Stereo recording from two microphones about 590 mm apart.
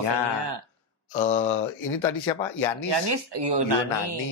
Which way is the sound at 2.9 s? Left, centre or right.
Right.